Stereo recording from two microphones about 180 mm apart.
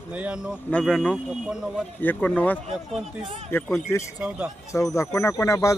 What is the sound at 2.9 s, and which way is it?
Speech, centre (ahead or behind).